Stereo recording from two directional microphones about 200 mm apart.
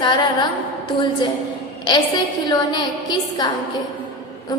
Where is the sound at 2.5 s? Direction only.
20° left (ahead or behind).